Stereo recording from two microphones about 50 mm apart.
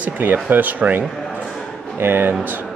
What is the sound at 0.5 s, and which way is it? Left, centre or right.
Speech, right.